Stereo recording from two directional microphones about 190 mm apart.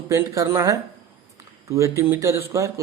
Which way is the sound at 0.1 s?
15° right (ahead or behind).